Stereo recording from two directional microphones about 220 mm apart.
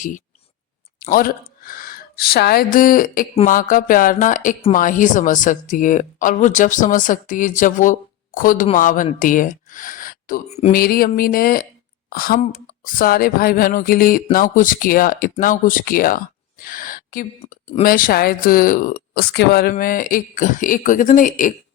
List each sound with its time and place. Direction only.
0.9 s speech: 40° left (ahead or behind)